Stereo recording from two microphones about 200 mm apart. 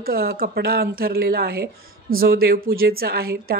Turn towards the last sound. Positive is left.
turn(degrees=-50)  # may be behind; listen again after turning